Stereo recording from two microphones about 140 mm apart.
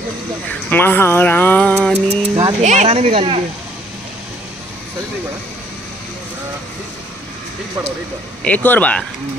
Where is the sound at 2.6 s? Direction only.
55° right (ahead or behind).